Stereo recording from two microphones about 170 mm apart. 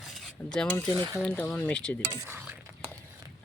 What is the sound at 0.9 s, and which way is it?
Cutlery, 25° right (ahead or behind).